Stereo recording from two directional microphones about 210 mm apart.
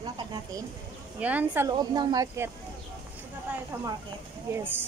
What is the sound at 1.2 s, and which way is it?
Speech, 5° right (ahead or behind).